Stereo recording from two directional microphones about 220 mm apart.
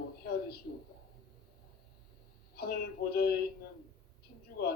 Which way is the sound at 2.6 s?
45° left (ahead or behind).